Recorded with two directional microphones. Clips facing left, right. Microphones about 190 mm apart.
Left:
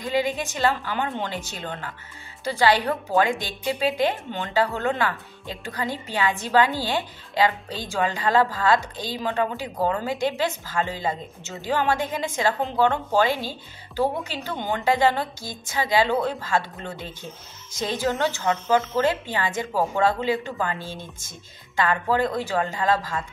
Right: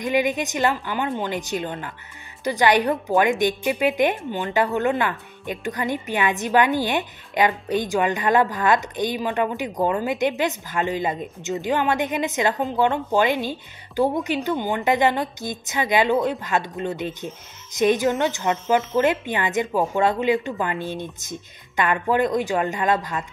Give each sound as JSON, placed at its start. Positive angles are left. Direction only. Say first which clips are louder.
{"t": 0.0, "sound": "a woman's voice", "louder": "right 3 dB", "side_deg": -15}